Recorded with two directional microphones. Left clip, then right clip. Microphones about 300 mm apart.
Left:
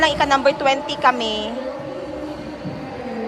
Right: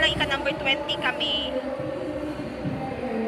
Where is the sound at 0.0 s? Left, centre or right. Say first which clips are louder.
Left 8 dB; left.